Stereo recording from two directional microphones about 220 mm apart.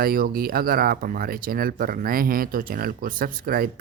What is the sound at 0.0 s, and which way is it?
Speech, 40° right (ahead or behind).